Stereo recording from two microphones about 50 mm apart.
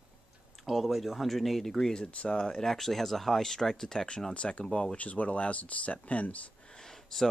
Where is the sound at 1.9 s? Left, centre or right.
Left.